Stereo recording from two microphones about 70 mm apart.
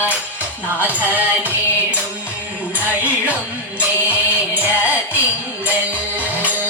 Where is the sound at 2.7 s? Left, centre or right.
Right.